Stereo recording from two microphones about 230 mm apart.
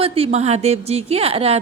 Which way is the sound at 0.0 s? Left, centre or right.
Right.